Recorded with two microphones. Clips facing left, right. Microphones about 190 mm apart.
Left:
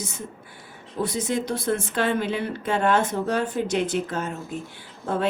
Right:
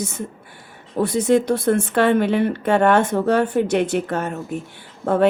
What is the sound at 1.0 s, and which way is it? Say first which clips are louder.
A woman's voice: right 9 dB; 70° right (ahead or behind).